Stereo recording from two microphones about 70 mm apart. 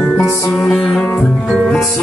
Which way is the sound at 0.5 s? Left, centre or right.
Centre.